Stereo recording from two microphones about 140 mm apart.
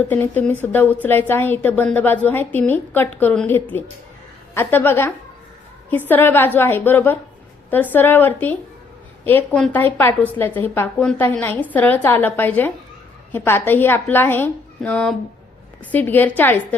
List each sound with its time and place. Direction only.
0.0 s a woman's voice: 15° left (ahead or behind)